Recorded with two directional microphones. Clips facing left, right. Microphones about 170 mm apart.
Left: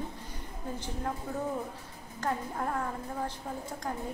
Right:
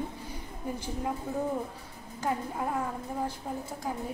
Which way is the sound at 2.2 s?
10° right (ahead or behind).